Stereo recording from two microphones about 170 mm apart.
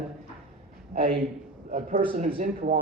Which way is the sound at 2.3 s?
55° right (ahead or behind).